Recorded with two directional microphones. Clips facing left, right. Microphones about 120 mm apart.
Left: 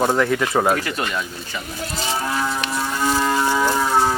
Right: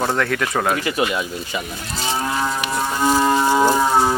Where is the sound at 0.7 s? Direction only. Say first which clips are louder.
Right 3 dB; 5° right (ahead or behind).